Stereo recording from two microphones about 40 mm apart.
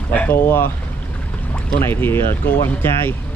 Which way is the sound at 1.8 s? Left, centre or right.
Left.